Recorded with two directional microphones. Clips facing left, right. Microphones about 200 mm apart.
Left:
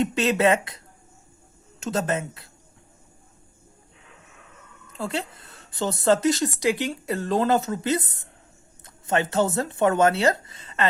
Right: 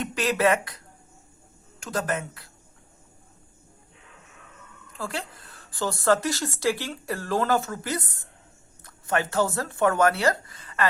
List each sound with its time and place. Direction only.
0.0 s a woman's voice: 25° left (ahead or behind)
1.8 s a woman's voice: 25° left (ahead or behind)
4.9 s a woman's voice: 25° left (ahead or behind)